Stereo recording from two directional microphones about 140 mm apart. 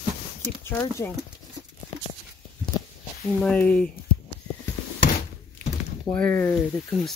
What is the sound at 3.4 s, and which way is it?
Speech, 10° left (ahead or behind).